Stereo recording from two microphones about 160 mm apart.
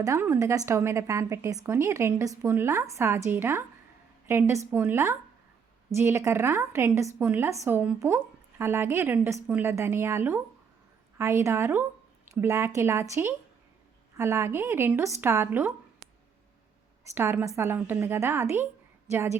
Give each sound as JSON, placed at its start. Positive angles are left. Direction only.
{"t": 0.0, "sound": "a woman's voice", "side_deg": -15}
{"t": 17.2, "sound": "a woman's voice", "side_deg": -15}